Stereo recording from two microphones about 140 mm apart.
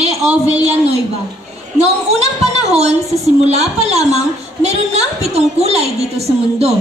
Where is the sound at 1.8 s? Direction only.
50° right (ahead or behind).